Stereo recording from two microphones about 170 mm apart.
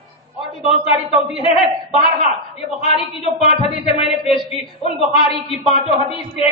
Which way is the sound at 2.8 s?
35° left (ahead or behind).